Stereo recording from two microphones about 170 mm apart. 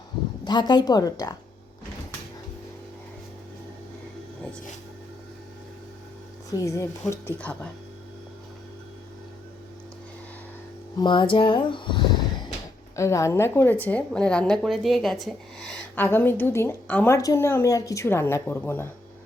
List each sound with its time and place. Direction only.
0.4 s speech: 25° left (ahead or behind)
6.5 s a woman's voice: 20° left (ahead or behind)
11.0 s speech: 30° left (ahead or behind)
13.0 s a woman's voice: 15° left (ahead or behind)